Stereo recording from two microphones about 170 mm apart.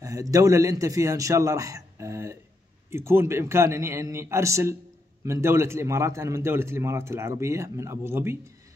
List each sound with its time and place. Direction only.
0.0 s a man's voice: 20° right (ahead or behind)